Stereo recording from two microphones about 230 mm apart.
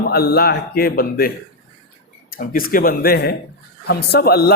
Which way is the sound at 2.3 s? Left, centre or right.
Left.